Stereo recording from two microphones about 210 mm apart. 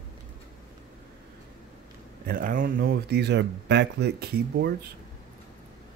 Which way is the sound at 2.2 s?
40° right (ahead or behind).